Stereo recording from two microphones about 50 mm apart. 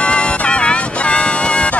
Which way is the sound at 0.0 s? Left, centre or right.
Left.